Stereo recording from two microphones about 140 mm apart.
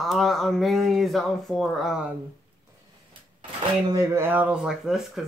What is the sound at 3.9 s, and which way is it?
Speech, 25° right (ahead or behind).